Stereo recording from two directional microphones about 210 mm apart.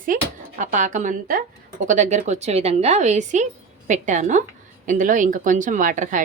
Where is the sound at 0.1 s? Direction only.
40° right (ahead or behind).